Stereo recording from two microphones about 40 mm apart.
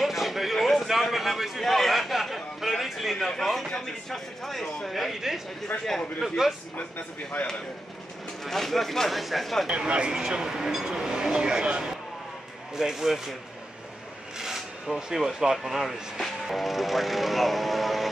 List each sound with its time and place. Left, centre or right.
0.0 s a sound: centre
3.3 s speech: centre
5.7 s a man's voice: left
6.2 s speech: centre
8.5 s speech: centre
9.8 s speech: right
12.7 s speech: centre
14.4 s a sound: centre
15.1 s speech: centre